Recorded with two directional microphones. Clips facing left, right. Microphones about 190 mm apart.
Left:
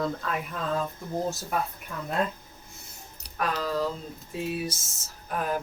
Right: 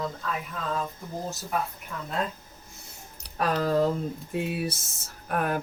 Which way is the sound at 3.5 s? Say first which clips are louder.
Right 6 dB; 50° right (ahead or behind).